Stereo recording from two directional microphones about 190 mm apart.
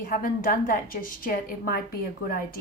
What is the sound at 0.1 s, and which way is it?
Speech, 50° left (ahead or behind).